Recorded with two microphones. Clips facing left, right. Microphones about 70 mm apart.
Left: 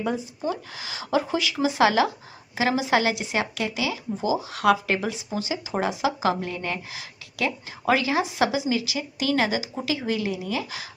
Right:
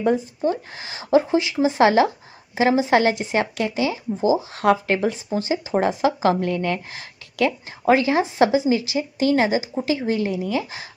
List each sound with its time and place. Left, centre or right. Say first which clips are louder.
0.0 s speech: right 7 dB; right